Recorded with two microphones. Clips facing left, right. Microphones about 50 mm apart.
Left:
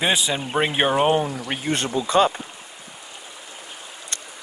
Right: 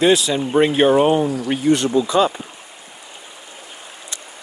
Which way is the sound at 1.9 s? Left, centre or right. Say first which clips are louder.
Right 7 dB; left.